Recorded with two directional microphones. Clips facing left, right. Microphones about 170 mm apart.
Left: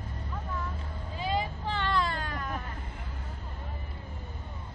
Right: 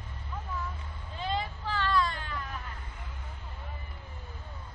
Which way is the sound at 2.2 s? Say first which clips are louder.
Left 3 dB; 45° left (ahead or behind).